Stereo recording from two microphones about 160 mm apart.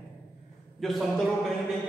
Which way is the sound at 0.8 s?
Centre (ahead or behind).